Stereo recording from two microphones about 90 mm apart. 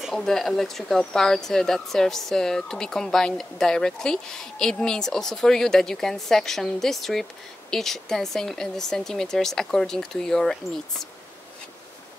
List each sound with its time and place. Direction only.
0.0 s speech: 5° left (ahead or behind)